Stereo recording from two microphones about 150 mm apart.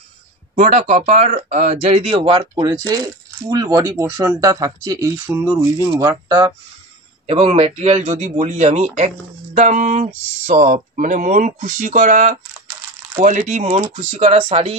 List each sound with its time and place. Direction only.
0.6 s speech: 55° right (ahead or behind); by 5.1 s 25° right (ahead or behind)
5.2 s speech: 10° right (ahead or behind)
5.5 s speech: 25° right (ahead or behind)
7.2 s speech: 40° right (ahead or behind)